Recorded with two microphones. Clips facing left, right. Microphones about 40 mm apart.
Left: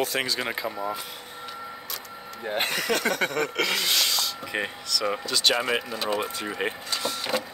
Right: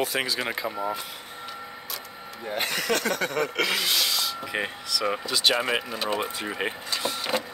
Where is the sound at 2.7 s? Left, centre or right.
Centre.